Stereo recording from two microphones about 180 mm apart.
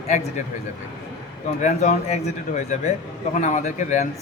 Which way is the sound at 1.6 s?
40° left (ahead or behind).